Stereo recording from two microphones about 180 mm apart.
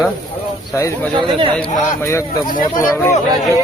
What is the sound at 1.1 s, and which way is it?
Speech, 30° right (ahead or behind).